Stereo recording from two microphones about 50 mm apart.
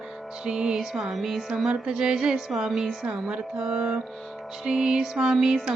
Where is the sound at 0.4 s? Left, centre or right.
Centre.